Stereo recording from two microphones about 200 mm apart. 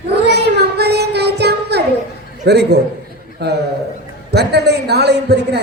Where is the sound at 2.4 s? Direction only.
55° right (ahead or behind).